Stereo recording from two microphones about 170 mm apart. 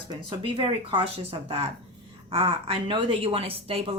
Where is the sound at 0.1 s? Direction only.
30° right (ahead or behind).